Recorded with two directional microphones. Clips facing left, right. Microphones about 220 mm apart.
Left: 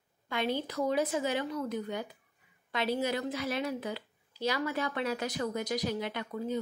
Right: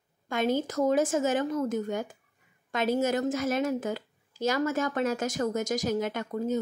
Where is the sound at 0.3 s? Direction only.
45° right (ahead or behind).